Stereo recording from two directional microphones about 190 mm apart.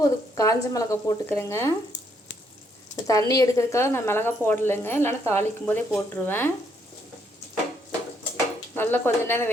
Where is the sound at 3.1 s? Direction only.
20° left (ahead or behind).